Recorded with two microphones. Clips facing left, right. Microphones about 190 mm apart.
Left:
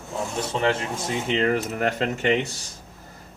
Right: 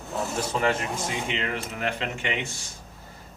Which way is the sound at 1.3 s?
40° left (ahead or behind).